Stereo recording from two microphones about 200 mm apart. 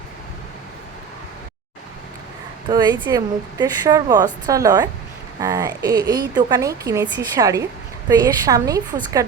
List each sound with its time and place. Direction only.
2.6 s a woman's voice: 20° right (ahead or behind)